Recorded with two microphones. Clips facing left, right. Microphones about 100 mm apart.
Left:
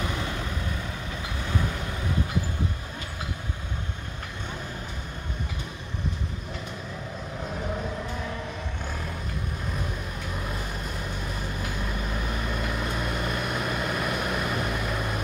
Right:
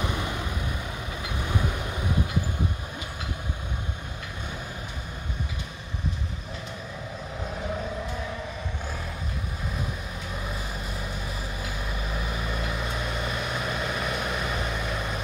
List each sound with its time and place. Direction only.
0.0 s vehicle: 15° right (ahead or behind)
10.4 s vehicle: centre (ahead or behind)